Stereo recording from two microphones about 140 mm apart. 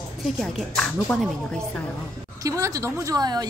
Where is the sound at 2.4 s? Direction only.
25° right (ahead or behind).